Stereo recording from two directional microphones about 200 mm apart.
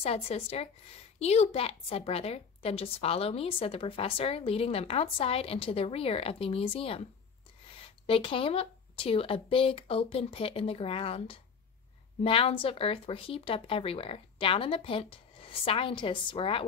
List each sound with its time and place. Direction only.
0.0 s a woman's voice: 30° left (ahead or behind)
8.1 s a woman's voice: 25° left (ahead or behind)